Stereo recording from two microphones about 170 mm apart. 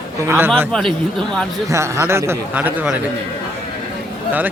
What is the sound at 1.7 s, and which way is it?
Speech, 15° right (ahead or behind).